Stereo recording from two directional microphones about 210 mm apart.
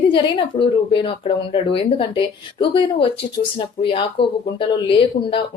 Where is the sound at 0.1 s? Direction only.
25° left (ahead or behind).